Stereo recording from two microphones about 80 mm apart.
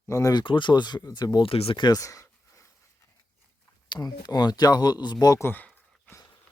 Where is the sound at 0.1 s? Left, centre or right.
Left.